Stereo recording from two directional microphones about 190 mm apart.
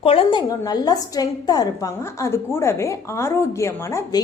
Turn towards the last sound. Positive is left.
turn(degrees=15)  # may be behind; listen again after turning